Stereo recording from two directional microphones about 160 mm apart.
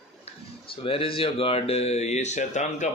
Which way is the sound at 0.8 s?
35° left (ahead or behind).